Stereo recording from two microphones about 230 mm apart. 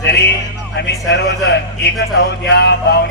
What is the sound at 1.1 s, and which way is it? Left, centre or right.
A man's voice, left.